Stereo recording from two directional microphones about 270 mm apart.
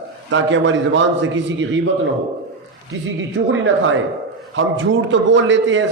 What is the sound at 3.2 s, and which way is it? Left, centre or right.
A man's voice, right.